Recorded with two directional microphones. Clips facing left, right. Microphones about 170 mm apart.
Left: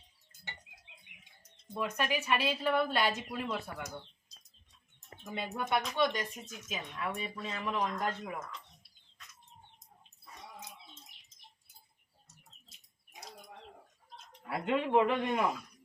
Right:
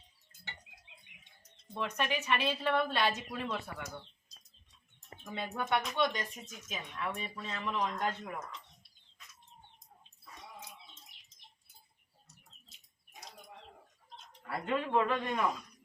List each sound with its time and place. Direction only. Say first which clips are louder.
1.1 s music: left 2 dB; 90° left
2.0 s a woman's voice: left 1 dB; 10° left (ahead or behind)
5.2 s speech: even; 5° left (ahead or behind)
14.4 s a woman's voice: left 2 dB; 15° left (ahead or behind)